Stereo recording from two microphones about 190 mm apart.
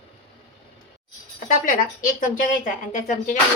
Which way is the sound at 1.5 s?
45° left (ahead or behind).